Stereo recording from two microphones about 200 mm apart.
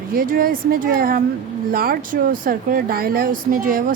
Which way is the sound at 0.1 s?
45° right (ahead or behind).